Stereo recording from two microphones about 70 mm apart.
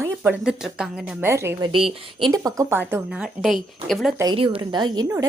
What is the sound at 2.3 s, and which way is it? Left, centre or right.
Speech, right.